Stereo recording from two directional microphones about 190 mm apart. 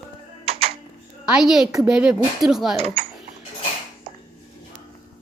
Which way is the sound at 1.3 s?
Centre (ahead or behind).